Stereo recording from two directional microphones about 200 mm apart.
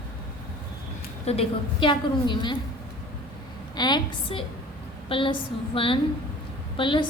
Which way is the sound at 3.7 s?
20° left (ahead or behind).